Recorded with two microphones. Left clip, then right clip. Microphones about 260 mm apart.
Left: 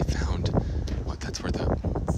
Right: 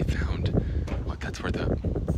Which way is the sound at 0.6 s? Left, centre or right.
Centre.